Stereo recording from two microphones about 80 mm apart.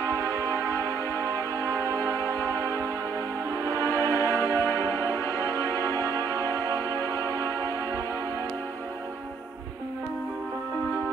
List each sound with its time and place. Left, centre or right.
0.0 s music: right
1.1 s music: left
3.8 s music: left